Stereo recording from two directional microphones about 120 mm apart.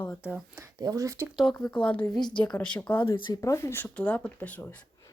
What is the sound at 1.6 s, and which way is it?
Speech, 10° left (ahead or behind).